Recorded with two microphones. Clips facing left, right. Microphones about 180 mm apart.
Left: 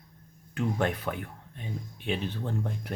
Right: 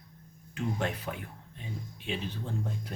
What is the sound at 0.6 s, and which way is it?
Speech, 60° left (ahead or behind).